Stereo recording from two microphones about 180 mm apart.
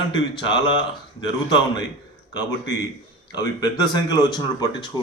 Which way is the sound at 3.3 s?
20° left (ahead or behind).